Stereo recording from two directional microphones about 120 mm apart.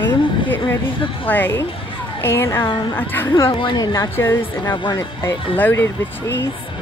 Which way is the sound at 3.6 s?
35° left (ahead or behind).